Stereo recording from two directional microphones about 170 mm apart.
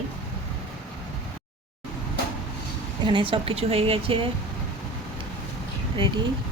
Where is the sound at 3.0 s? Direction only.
30° right (ahead or behind).